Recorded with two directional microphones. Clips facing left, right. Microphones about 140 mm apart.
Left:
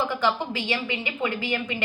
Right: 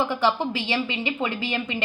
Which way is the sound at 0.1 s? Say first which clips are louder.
Right 2 dB; 20° right (ahead or behind).